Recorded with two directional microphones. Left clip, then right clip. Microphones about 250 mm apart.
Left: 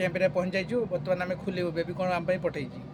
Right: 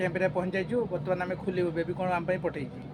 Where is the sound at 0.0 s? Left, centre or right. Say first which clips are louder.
Left 2 dB; centre.